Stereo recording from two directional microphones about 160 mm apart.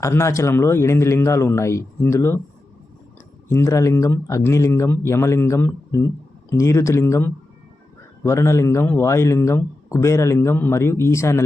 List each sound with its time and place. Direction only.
0.0 s a man's voice: 15° left (ahead or behind)
3.5 s a man's voice: 15° left (ahead or behind)